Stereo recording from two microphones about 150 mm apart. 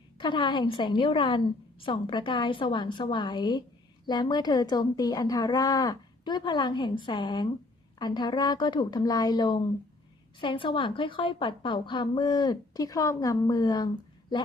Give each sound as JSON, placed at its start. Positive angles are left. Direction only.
{"t": 0.2, "sound": "a woman's voice", "side_deg": 30}